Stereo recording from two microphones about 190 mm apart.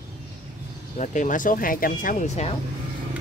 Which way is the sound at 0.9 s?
40° left (ahead or behind).